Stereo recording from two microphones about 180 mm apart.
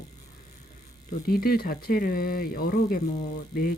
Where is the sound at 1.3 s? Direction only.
55° left (ahead or behind).